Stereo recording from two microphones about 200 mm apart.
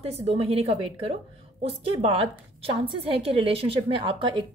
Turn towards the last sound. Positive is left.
turn(degrees=-25)  # may be behind; listen again after turning